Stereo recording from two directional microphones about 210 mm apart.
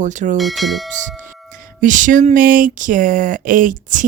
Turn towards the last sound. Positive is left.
turn(degrees=-40)  # may be behind; listen again after turning